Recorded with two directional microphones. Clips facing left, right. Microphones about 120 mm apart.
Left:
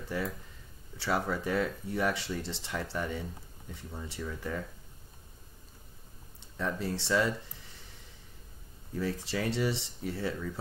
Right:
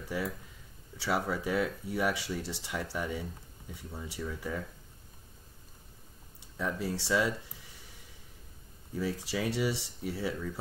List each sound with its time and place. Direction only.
0.1 s speech: 10° right (ahead or behind)
6.5 s speech: 5° right (ahead or behind)
8.9 s speech: 10° right (ahead or behind)